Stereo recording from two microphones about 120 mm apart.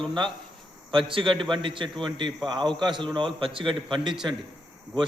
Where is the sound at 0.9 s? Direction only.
45° right (ahead or behind).